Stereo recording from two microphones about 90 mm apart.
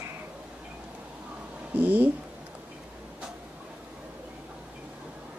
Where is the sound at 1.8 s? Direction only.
20° right (ahead or behind).